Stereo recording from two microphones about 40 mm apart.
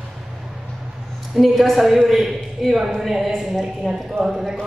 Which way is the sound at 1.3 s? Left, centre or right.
Centre.